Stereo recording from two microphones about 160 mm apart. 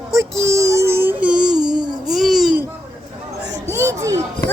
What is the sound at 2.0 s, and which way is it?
Babbling, centre (ahead or behind).